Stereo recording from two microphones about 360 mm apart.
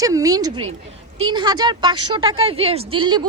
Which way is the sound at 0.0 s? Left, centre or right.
Centre.